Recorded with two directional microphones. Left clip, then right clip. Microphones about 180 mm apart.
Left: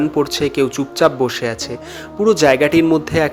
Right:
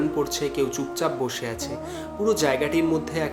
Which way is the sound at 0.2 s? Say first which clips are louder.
Left 8 dB; 40° left (ahead or behind).